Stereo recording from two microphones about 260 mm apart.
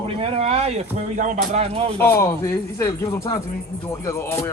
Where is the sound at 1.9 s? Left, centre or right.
Centre.